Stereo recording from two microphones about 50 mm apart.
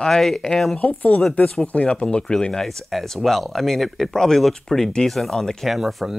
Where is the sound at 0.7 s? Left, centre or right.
Left; by 5.5 s centre.